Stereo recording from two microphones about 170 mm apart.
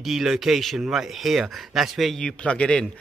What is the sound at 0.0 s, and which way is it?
A man's voice, centre (ahead or behind).